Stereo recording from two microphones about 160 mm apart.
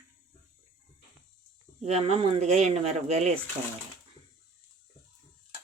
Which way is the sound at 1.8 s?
40° right (ahead or behind).